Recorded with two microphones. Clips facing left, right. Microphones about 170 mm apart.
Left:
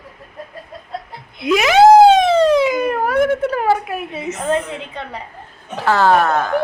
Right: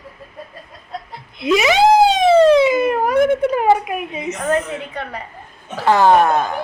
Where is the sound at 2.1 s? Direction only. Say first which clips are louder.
Right 2 dB; centre (ahead or behind).